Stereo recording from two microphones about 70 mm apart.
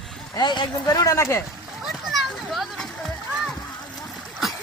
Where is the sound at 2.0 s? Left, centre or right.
Centre.